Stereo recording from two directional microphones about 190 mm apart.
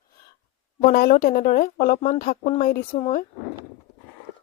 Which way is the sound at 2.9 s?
40° left (ahead or behind).